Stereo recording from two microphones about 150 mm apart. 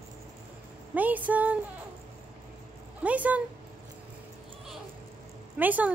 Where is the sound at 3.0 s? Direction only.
10° right (ahead or behind).